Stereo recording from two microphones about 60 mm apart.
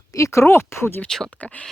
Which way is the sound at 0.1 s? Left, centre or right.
Left.